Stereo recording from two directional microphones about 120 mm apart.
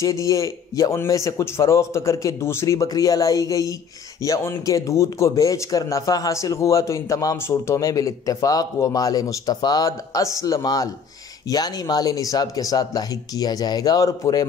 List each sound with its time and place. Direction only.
0.0 s speech: 25° left (ahead or behind)